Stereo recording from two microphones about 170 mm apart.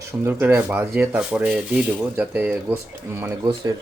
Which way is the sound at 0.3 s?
15° right (ahead or behind).